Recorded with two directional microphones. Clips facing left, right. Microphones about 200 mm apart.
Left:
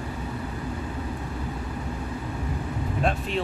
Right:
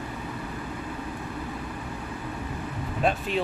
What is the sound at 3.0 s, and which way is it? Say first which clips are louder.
Speech: right 2 dB; centre (ahead or behind).